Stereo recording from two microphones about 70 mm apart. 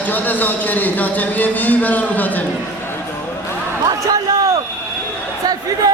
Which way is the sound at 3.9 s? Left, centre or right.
Right.